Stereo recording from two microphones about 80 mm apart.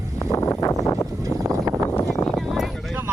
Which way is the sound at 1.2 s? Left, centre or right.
Right.